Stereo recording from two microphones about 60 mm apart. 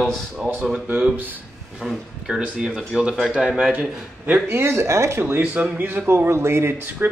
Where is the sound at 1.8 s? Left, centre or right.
Centre.